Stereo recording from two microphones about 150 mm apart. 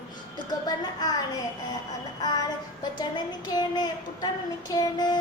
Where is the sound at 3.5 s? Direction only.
30° left (ahead or behind).